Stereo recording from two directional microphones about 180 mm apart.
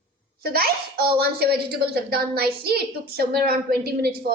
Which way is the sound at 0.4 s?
60° right (ahead or behind).